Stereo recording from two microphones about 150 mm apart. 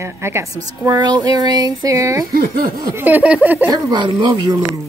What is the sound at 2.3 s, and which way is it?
Speech, 85° right.